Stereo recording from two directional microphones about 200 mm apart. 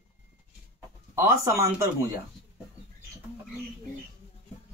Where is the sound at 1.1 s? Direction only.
15° right (ahead or behind).